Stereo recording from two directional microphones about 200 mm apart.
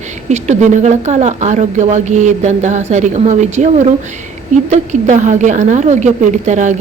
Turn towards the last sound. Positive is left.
turn(degrees=-35)  # may be behind; listen again after turning